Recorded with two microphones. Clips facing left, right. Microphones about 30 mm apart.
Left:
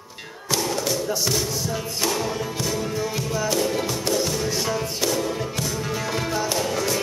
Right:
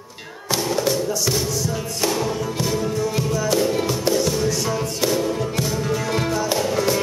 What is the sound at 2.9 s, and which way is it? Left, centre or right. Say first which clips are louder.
Music: right 3 dB; centre.